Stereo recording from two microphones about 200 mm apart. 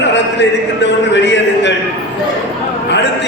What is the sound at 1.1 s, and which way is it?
Speech, 60° left (ahead or behind).